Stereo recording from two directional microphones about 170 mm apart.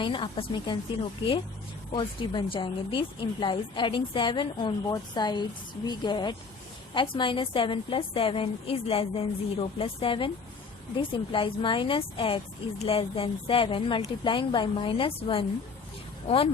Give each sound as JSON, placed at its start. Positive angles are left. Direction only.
{"t": 0.0, "sound": "a woman's voice", "side_deg": 30}
{"t": 1.9, "sound": "a woman's voice", "side_deg": 30}